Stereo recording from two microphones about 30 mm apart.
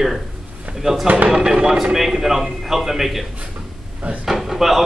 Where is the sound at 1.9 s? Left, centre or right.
Centre.